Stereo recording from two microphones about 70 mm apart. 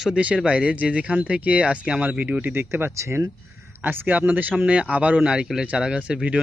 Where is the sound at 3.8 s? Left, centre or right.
Right.